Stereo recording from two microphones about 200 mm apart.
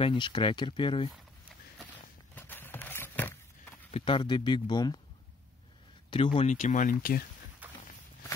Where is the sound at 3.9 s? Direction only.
25° left (ahead or behind).